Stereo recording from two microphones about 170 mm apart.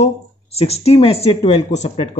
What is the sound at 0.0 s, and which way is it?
Speech, 35° left (ahead or behind).